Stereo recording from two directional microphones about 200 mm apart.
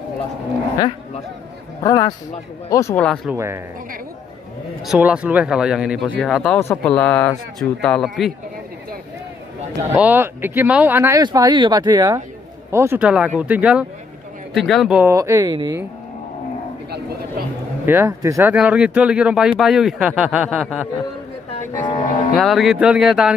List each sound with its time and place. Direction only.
1.8 s speech: 15° left (ahead or behind)
3.3 s speech: 15° right (ahead or behind)
4.8 s speech: 5° right (ahead or behind)
9.9 s speech: 10° right (ahead or behind)
17.8 s speech: 10° right (ahead or behind)
21.9 s cattle: 40° left (ahead or behind)
22.3 s speech: centre (ahead or behind)